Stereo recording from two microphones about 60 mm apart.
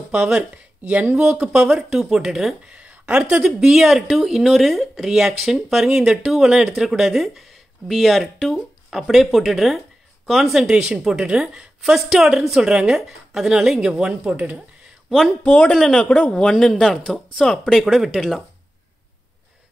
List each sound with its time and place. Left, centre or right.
0.1 s a woman's voice: centre
2.6 s speech: centre
3.4 s a woman's voice: centre
14.3 s speech: centre
15.0 s a man's voice: centre
15.4 s a man's voice: centre
15.7 s speech: centre
16.0 s speech: centre